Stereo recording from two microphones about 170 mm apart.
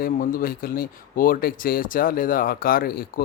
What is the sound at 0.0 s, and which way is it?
Speech, 55° left (ahead or behind).